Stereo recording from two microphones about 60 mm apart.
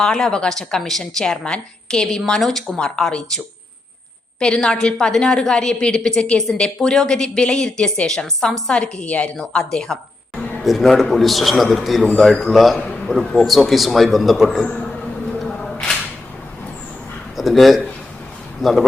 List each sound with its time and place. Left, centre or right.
0.0 s a woman's voice: centre
10.6 s a man's voice: centre
15.4 s a sound: centre
17.3 s a man's voice: centre